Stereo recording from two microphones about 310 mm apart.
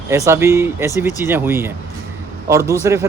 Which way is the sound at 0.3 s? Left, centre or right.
Centre.